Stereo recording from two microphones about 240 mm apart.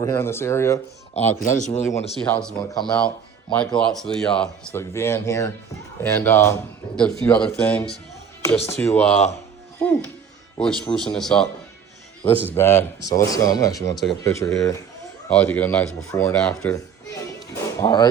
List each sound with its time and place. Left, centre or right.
0.0 s speech: centre
1.1 s a man's voice: left
2.2 s speech: centre
13.9 s speech: centre
14.3 s speech: centre